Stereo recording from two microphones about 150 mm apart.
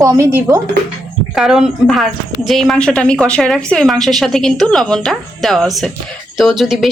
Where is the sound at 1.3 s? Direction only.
Centre (ahead or behind).